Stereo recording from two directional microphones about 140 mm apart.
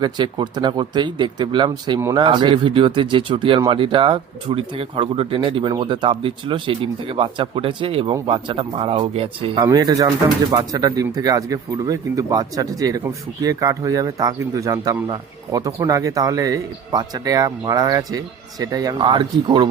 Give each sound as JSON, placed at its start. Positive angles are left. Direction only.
{"t": 0.0, "sound": "speech", "side_deg": -30}
{"t": 9.6, "sound": "speech", "side_deg": -25}